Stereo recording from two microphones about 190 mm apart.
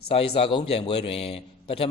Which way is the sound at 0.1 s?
30° left (ahead or behind).